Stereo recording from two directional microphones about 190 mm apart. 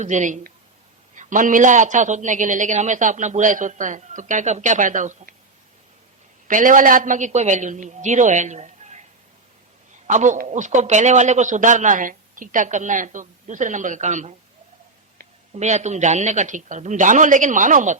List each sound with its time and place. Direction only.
0.0 s a man's voice: 40° right (ahead or behind)
6.5 s a man's voice: 45° right (ahead or behind)
10.1 s a man's voice: 40° right (ahead or behind)